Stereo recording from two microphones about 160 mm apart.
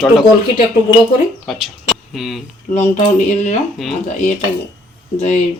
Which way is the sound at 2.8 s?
45° left (ahead or behind).